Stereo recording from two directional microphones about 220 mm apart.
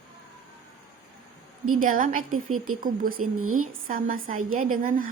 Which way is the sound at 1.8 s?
40° right (ahead or behind).